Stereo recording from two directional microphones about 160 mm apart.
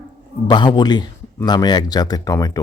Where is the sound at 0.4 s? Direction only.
25° left (ahead or behind).